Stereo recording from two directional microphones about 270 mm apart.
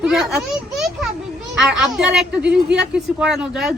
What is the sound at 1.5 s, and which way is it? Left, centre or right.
A child's voice, centre.